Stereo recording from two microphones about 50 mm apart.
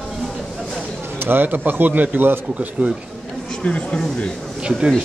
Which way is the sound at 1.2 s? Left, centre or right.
Right.